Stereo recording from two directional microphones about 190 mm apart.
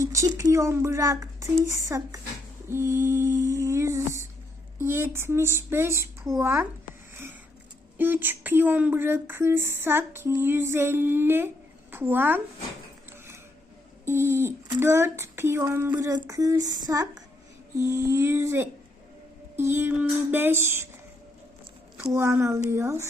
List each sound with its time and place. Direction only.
0.0 s speech: 15° right (ahead or behind)
2.6 s humming: 15° right (ahead or behind)
4.8 s speech: 10° right (ahead or behind)
7.9 s speech: 10° right (ahead or behind)
14.0 s speech: 15° right (ahead or behind)
21.9 s speech: 15° right (ahead or behind)